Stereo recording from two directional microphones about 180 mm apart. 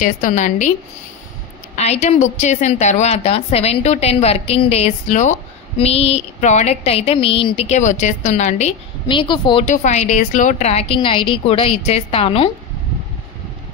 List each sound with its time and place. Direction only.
0.0 s a woman's voice: 45° left (ahead or behind)
1.8 s a woman's voice: 40° left (ahead or behind)
9.1 s a woman's voice: 25° left (ahead or behind)
9.7 s a woman's voice: 40° left (ahead or behind)